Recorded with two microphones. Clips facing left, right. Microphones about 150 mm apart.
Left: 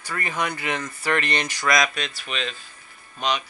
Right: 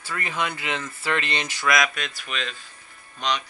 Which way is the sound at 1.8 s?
20° left (ahead or behind).